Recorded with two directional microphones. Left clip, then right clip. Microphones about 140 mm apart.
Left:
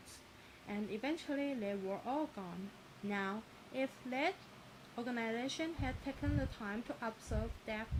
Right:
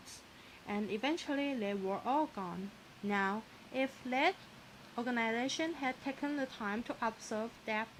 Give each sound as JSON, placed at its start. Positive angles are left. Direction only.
{"t": 0.7, "sound": "speech", "side_deg": -40}